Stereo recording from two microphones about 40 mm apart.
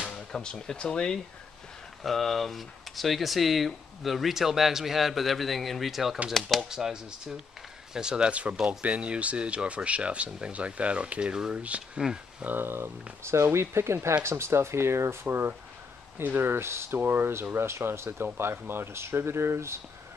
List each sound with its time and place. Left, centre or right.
0.1 s speech: centre
2.0 s speech: centre
6.4 s speech: centre
6.7 s speech: centre
8.3 s speech: right
12.0 s speech: centre
12.4 s speech: right
17.6 s speech: right